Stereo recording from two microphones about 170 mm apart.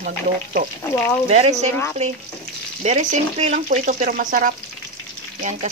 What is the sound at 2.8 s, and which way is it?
Speech, 45° right (ahead or behind).